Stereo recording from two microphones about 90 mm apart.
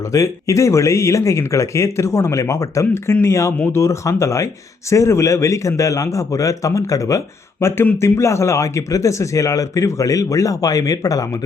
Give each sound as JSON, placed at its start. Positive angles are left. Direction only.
{"t": 0.1, "sound": "a man's voice", "side_deg": 35}
{"t": 2.8, "sound": "a man's voice", "side_deg": 25}